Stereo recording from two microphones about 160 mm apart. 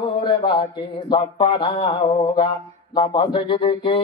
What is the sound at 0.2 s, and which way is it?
Speech, 30° left (ahead or behind).